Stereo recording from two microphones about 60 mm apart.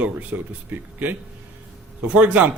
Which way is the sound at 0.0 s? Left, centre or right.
Right.